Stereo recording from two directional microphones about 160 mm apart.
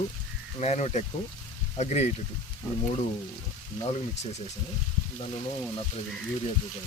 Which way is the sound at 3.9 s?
45° left (ahead or behind).